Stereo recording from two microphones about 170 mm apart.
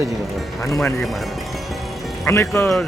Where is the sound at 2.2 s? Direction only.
20° left (ahead or behind).